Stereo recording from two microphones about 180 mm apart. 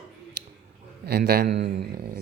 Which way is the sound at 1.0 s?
60° right (ahead or behind).